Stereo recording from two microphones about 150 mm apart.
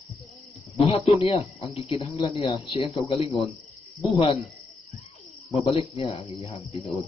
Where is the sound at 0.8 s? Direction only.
40° left (ahead or behind).